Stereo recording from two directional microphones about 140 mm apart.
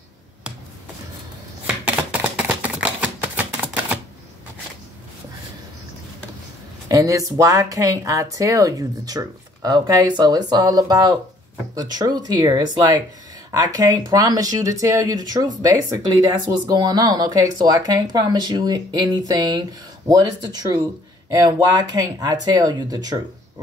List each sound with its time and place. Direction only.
2.1 s typewriter: 10° right (ahead or behind)
6.9 s speech: 25° right (ahead or behind)